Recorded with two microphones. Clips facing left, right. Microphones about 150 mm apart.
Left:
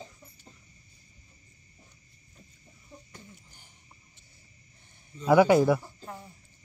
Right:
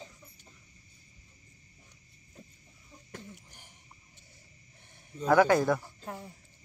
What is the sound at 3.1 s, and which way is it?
Throat clearing, 70° right (ahead or behind).